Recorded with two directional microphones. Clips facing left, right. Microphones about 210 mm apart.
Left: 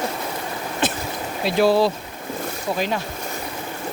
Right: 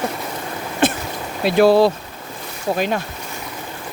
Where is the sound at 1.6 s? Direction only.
60° right (ahead or behind).